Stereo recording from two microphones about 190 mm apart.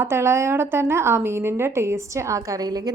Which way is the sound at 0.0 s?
15° right (ahead or behind).